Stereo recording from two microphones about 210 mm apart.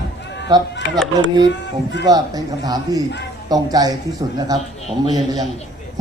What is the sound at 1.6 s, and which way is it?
Speech, 55° left (ahead or behind).